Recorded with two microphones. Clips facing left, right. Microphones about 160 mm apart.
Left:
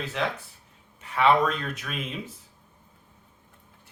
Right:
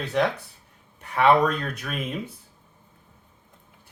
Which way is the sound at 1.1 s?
50° right (ahead or behind).